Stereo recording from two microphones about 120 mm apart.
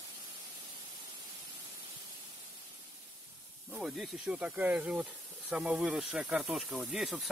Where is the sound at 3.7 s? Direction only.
5° right (ahead or behind).